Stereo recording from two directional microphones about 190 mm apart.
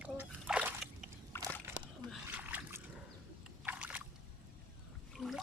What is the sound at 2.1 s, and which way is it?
Splash, 5° right (ahead or behind).